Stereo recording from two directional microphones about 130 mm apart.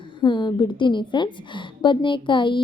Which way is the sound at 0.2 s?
35° left (ahead or behind).